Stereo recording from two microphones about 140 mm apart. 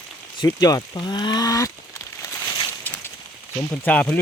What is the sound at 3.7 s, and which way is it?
Speech, 10° left (ahead or behind).